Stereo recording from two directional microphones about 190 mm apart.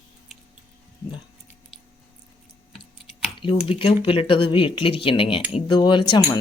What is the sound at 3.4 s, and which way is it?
Speech, 30° left (ahead or behind).